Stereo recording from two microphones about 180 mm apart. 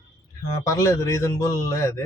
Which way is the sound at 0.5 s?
20° left (ahead or behind).